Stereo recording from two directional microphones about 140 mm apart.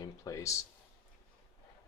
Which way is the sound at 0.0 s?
25° left (ahead or behind).